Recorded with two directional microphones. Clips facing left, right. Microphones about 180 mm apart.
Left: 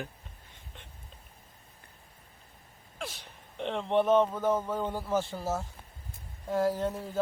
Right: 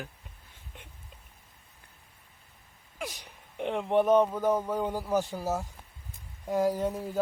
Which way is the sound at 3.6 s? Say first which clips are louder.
Right 2 dB; 10° right (ahead or behind).